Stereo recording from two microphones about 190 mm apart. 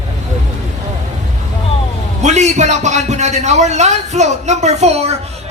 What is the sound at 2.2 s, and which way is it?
A man's voice, 35° right (ahead or behind).